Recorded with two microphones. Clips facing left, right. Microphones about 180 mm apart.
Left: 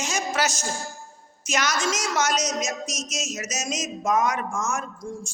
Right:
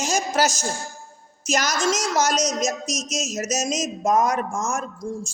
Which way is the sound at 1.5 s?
40° right (ahead or behind).